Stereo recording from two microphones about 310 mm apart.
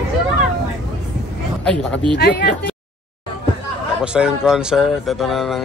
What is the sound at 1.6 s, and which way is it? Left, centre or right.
Speech, centre.